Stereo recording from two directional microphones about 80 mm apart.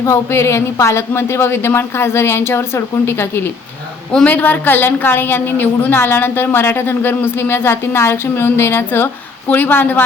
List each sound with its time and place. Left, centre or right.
0.0 s a woman's voice: left
4.1 s a woman's voice: centre